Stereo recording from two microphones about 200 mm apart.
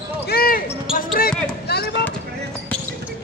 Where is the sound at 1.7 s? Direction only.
55° left (ahead or behind).